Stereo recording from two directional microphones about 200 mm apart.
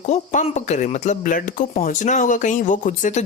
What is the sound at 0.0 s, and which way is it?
Speech, 35° left (ahead or behind).